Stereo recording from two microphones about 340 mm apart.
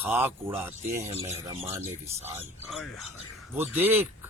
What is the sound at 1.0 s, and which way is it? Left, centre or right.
Speech, centre.